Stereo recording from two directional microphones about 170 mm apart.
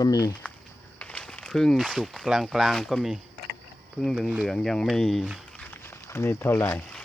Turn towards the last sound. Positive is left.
turn(degrees=5)  # may be behind; listen again after turning